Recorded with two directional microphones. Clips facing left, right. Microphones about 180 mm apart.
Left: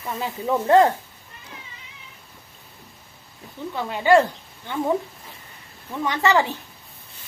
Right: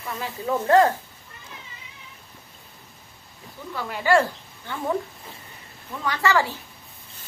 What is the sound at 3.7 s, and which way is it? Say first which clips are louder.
Speech: left 3 dB; 20° left (ahead or behind).